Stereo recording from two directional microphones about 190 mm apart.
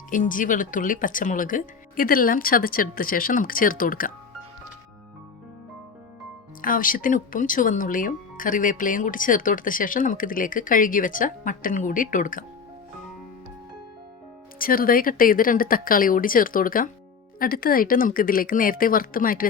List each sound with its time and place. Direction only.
0.1 s speech: 45° left (ahead or behind)
6.6 s speech: 45° left (ahead or behind)
14.6 s speech: 50° left (ahead or behind)